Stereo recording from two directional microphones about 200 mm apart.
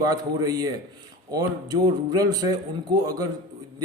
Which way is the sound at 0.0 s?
20° right (ahead or behind).